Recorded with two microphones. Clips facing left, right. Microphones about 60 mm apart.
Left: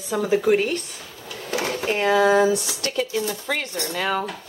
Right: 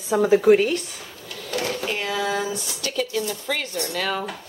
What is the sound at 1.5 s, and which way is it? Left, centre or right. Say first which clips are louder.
Drawer open or close: left 1 dB; centre.